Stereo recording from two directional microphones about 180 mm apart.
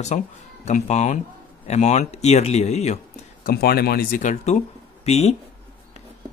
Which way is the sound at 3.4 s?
60° left (ahead or behind).